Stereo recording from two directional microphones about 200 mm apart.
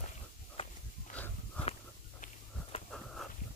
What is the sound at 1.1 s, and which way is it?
Dog, 40° left (ahead or behind).